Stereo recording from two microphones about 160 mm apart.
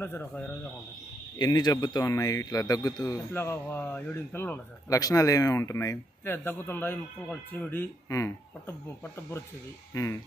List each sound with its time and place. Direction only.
0.0 s a man's voice: 10° left (ahead or behind)
1.4 s speech: 25° left (ahead or behind)